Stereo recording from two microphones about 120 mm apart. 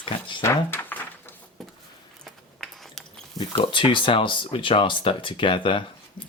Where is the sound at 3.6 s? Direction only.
40° left (ahead or behind).